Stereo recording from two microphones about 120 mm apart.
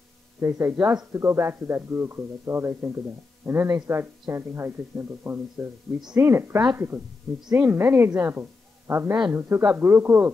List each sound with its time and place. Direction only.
0.4 s a woman's voice: 20° right (ahead or behind)